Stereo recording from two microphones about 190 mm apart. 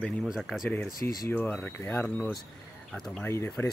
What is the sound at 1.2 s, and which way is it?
Speech, 10° left (ahead or behind).